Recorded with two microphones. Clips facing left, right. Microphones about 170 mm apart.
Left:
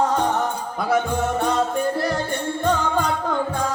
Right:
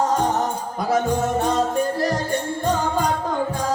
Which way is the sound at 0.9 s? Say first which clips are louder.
Right 1 dB; 40° right (ahead or behind).